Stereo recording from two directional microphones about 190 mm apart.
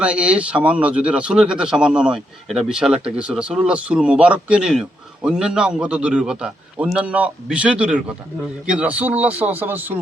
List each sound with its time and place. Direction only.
0.0 s speech: 5° right (ahead or behind)